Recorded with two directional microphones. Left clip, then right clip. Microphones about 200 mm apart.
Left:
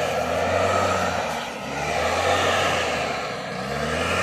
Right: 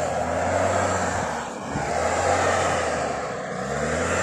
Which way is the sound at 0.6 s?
25° left (ahead or behind).